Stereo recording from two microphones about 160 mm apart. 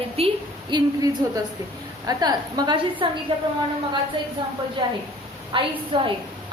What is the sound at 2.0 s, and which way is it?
A woman's voice, 25° right (ahead or behind).